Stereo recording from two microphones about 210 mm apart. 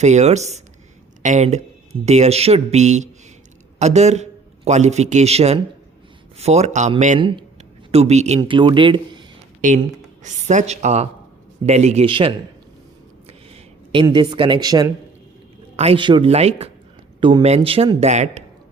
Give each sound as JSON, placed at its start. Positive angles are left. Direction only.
{"t": 0.0, "sound": "a man's voice", "side_deg": -35}
{"t": 8.4, "sound": "speech", "side_deg": -20}
{"t": 9.6, "sound": "speech", "side_deg": -35}
{"t": 13.9, "sound": "speech", "side_deg": -20}
{"t": 15.7, "sound": "speech", "side_deg": -30}